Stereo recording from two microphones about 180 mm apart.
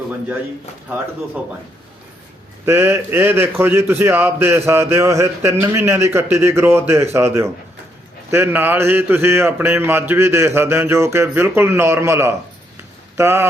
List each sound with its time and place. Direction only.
2.6 s a man's voice: 10° right (ahead or behind)